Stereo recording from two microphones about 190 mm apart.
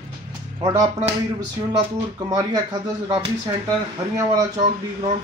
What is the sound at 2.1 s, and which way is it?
Speech, 20° right (ahead or behind).